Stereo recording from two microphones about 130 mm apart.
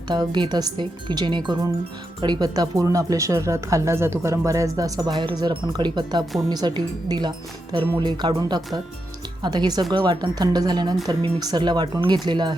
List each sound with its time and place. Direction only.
0.1 s speech: 35° right (ahead or behind)